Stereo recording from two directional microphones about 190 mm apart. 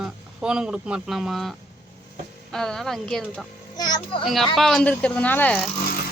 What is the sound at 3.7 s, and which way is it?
Speech, 20° left (ahead or behind).